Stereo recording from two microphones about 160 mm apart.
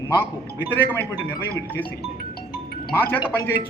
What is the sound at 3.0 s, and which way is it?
Speech, 10° left (ahead or behind).